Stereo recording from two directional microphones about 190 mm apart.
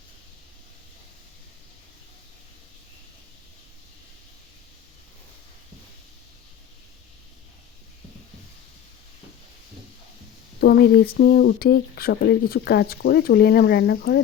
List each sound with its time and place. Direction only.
10.6 s speech: 55° left (ahead or behind)